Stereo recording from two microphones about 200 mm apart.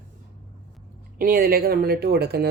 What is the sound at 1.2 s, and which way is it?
Speech, 50° right (ahead or behind).